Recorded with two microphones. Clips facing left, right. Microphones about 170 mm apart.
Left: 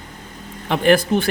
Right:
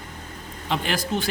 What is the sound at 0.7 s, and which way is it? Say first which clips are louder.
Speech: left 10 dB; 60° left (ahead or behind).